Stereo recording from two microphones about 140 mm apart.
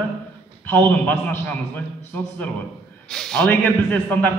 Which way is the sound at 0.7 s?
10° left (ahead or behind).